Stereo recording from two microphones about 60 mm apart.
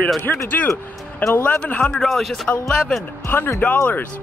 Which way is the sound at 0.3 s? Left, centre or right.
Left.